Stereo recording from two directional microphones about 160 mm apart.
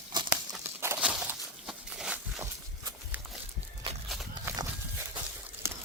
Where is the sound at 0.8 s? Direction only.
10° right (ahead or behind).